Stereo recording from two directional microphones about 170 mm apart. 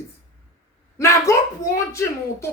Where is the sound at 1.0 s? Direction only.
15° left (ahead or behind).